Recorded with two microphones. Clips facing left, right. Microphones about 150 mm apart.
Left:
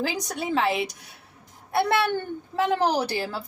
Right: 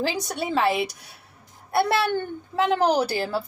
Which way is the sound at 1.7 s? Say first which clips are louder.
Right 1 dB; 30° right (ahead or behind).